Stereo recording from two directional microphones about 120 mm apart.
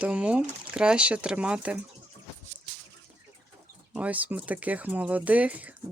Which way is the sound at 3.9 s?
10° right (ahead or behind).